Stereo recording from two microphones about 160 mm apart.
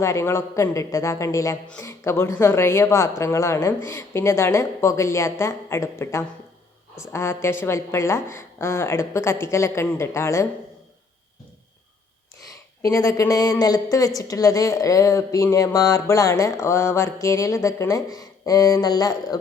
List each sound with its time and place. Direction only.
0.0 s a woman's voice: 20° left (ahead or behind)
12.8 s speech: 20° left (ahead or behind)